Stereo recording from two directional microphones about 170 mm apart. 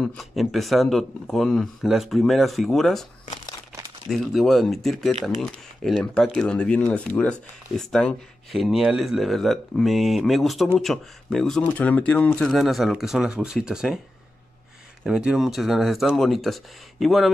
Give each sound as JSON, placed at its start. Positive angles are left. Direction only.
{"t": 0.0, "sound": "speech", "side_deg": 0}
{"t": 4.1, "sound": "speech", "side_deg": 0}
{"t": 15.0, "sound": "speech", "side_deg": -5}